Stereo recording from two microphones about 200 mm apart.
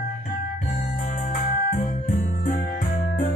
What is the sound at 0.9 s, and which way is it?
Music, 35° left (ahead or behind).